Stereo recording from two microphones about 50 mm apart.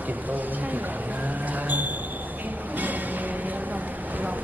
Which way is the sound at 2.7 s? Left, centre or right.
Right.